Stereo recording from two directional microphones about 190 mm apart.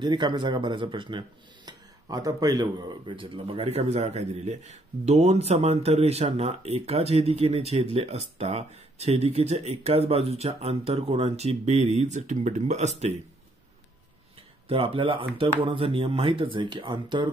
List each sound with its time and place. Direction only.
0.0 s speech: 25° right (ahead or behind)
14.7 s speech: 30° right (ahead or behind)